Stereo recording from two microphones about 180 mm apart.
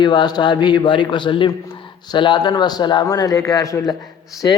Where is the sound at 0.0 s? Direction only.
25° left (ahead or behind).